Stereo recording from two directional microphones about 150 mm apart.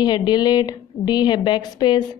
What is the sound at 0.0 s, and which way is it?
A woman's voice, 30° left (ahead or behind).